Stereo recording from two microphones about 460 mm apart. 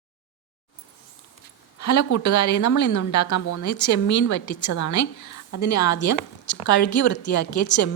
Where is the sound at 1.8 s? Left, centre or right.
Left.